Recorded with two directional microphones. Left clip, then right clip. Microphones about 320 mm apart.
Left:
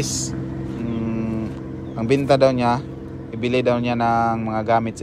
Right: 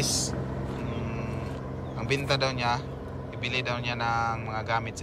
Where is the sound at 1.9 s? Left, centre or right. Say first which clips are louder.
Left 11 dB; centre.